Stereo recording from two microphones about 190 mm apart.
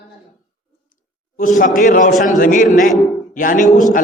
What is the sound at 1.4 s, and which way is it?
A man's voice, 45° left (ahead or behind).